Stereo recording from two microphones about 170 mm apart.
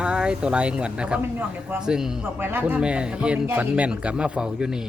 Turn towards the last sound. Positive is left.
turn(degrees=-5)  # may be behind; listen again after turning